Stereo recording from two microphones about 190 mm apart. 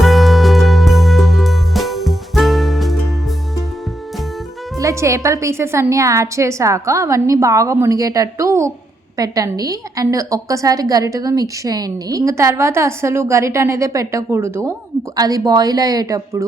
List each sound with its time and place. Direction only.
0.0 s music: centre (ahead or behind)
4.8 s a woman's voice: 15° right (ahead or behind)